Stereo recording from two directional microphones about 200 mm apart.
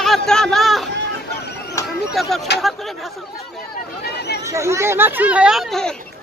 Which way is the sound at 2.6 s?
Centre (ahead or behind).